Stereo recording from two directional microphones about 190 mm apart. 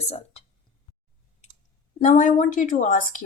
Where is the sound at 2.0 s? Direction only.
45° left (ahead or behind).